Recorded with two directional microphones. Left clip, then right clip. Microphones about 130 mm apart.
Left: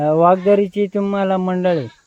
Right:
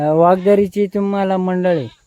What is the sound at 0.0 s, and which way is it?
Speech, 45° right (ahead or behind).